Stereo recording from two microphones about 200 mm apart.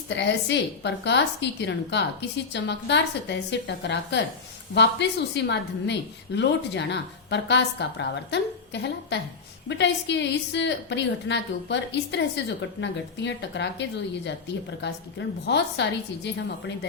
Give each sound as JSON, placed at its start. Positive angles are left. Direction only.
{"t": 0.2, "sound": "a woman's voice", "side_deg": 60}